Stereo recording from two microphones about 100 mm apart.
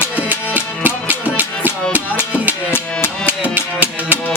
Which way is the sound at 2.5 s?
25° left (ahead or behind).